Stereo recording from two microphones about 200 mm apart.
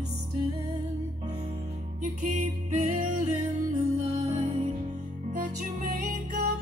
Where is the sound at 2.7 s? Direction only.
35° right (ahead or behind).